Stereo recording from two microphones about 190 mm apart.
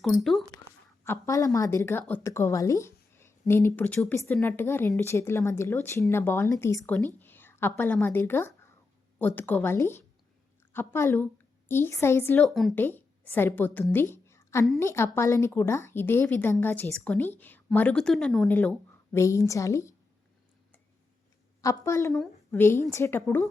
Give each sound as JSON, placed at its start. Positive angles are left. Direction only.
{"t": 0.0, "sound": "speech", "side_deg": 0}
{"t": 1.0, "sound": "speech", "side_deg": 15}
{"t": 7.2, "sound": "a sound", "side_deg": 10}
{"t": 8.0, "sound": "speech", "side_deg": 10}
{"t": 12.5, "sound": "a woman's voice", "side_deg": 0}
{"t": 21.6, "sound": "speech", "side_deg": 15}
{"t": 22.1, "sound": "a woman's voice", "side_deg": 0}
{"t": 22.9, "sound": "speech", "side_deg": 15}